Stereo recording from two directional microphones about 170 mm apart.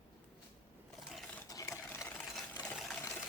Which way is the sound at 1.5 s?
20° left (ahead or behind).